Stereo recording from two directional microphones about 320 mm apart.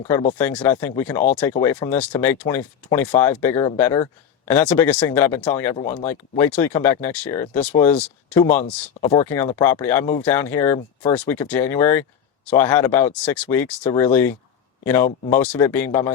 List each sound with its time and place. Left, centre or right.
0.1 s speech: centre
5.7 s speech: left
6.1 s speech: centre